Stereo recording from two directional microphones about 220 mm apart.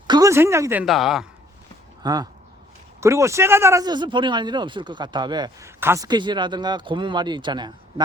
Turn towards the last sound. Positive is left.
turn(degrees=-20)  # may be behind; listen again after turning